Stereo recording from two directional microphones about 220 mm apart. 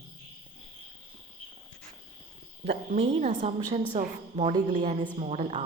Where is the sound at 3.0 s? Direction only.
30° right (ahead or behind).